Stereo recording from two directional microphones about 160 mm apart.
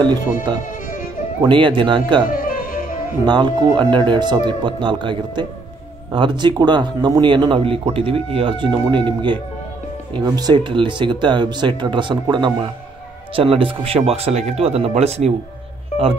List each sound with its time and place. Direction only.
1.4 s speech: 30° right (ahead or behind)
2.3 s music: 60° left (ahead or behind)
3.3 s speech: 25° right (ahead or behind)